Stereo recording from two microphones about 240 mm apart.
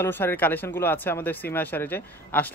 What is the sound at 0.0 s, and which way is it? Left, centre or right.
Speech, centre.